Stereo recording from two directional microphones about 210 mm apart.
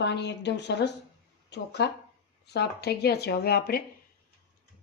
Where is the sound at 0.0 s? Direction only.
55° left (ahead or behind).